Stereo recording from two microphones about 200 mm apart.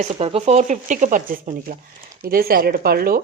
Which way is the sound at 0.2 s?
30° right (ahead or behind).